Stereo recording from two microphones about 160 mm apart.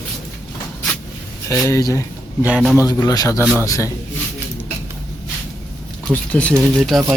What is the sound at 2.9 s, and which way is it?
Speech, 25° left (ahead or behind).